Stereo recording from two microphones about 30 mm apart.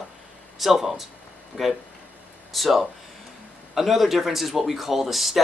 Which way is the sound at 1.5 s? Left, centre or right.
Right.